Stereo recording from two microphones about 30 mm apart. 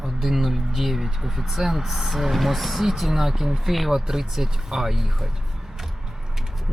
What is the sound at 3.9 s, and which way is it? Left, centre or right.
Speech, centre.